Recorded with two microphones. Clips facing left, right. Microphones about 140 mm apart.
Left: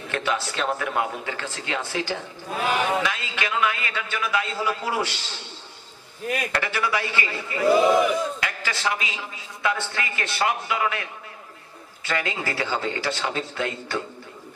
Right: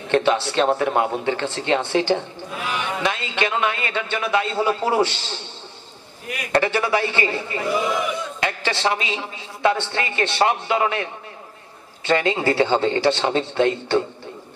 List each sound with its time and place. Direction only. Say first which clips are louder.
0.1 s a man's voice: right 8 dB; 30° right (ahead or behind)
2.6 s a man's voice: left 4 dB; 40° left (ahead or behind)
3.0 s a man's voice: right 4 dB; 30° right (ahead or behind)
6.5 s a man's voice: right 11 dB; 30° right (ahead or behind)